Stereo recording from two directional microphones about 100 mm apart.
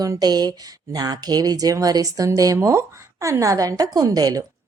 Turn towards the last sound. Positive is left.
turn(degrees=-40)  # may be behind; listen again after turning